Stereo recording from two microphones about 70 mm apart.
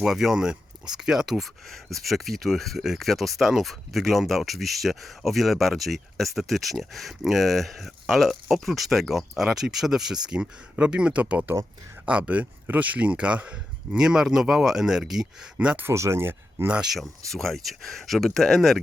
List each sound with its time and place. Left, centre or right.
0.0 s speech: centre
15.5 s speech: centre
15.8 s speech: right
16.6 s speech: centre
16.9 s speech: centre